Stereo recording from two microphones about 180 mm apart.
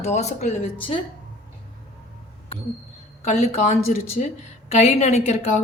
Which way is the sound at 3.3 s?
40° left (ahead or behind).